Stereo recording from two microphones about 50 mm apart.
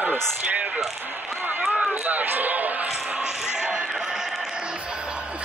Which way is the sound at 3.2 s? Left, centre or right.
Centre.